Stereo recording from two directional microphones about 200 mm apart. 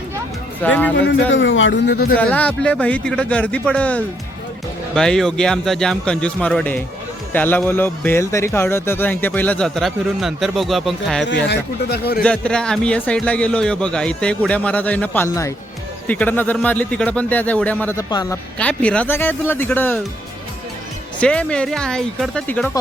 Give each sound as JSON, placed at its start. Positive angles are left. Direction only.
{"t": 0.6, "sound": "speech", "side_deg": 10}
{"t": 0.9, "sound": "a man's voice", "side_deg": 65}
{"t": 1.9, "sound": "speech", "side_deg": 50}
{"t": 2.1, "sound": "a man's voice", "side_deg": 5}
{"t": 11.3, "sound": "speech", "side_deg": 60}
{"t": 12.2, "sound": "a man's voice", "side_deg": 5}
{"t": 18.6, "sound": "speech", "side_deg": 5}
{"t": 21.2, "sound": "a man's voice", "side_deg": 5}